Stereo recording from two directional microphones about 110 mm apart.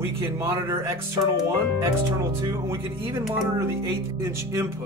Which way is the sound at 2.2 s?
25° right (ahead or behind).